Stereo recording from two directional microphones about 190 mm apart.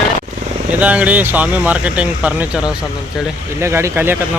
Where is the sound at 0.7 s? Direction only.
10° right (ahead or behind).